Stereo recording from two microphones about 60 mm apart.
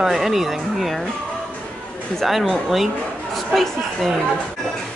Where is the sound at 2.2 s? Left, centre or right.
Centre.